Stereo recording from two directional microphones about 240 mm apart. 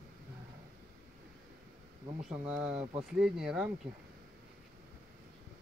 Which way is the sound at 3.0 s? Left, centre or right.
Centre.